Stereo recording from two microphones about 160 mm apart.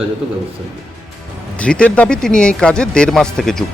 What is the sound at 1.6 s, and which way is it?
Speech, 5° left (ahead or behind).